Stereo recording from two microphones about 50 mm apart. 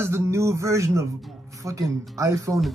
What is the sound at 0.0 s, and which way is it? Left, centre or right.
Speech, right.